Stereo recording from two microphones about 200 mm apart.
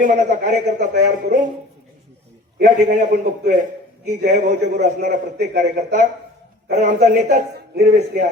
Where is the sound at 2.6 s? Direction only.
45° right (ahead or behind).